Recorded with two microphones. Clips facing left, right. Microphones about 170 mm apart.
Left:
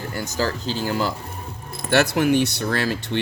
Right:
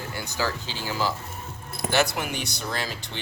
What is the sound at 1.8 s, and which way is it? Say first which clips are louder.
Speech: left 7 dB; 60° left (ahead or behind).